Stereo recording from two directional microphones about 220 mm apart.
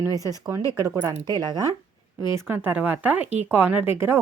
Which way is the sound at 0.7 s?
15° right (ahead or behind).